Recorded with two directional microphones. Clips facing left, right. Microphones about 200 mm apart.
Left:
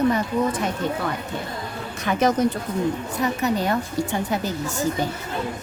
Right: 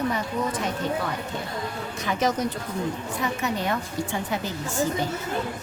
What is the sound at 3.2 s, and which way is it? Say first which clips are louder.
Speech: left 5 dB; 40° left (ahead or behind).